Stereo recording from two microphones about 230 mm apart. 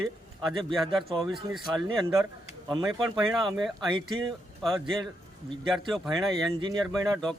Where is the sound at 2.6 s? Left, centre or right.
Centre.